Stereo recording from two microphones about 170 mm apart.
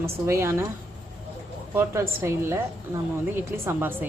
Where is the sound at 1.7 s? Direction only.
15° right (ahead or behind).